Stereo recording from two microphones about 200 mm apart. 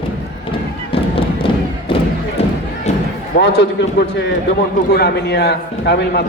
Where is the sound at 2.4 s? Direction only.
30° left (ahead or behind).